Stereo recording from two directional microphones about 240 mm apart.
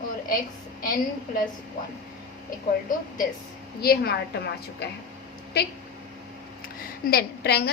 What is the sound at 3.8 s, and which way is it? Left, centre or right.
Speech, left.